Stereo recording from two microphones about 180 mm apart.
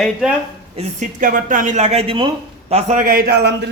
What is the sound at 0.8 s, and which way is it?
A man's voice, 45° right (ahead or behind).